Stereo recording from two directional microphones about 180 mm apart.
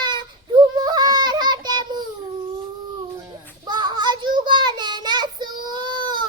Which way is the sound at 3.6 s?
25° right (ahead or behind).